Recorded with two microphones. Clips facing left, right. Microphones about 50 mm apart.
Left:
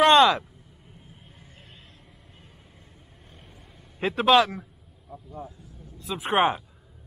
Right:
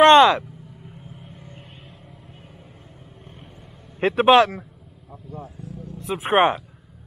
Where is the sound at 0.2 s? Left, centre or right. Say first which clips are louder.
Right 4 dB; right.